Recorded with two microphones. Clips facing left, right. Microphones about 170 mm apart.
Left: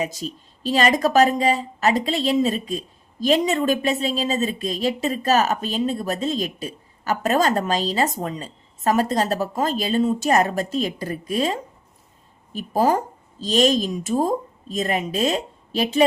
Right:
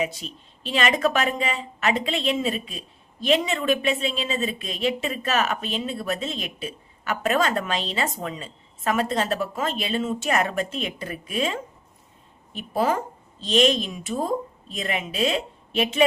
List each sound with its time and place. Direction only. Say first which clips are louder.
0.0 s speech: left 1 dB; 40° left (ahead or behind)